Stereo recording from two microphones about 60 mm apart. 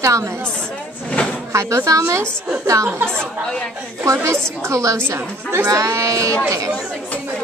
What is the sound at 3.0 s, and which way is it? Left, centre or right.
Speech, centre.